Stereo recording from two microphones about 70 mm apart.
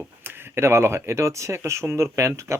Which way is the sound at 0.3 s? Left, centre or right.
Right.